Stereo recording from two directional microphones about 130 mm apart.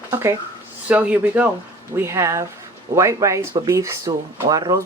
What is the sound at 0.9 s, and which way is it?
Speech, 10° right (ahead or behind).